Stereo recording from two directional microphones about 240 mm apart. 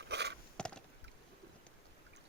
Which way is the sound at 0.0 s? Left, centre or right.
Right.